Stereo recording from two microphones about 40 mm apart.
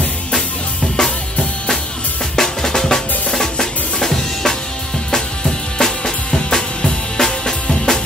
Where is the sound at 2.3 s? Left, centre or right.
Centre.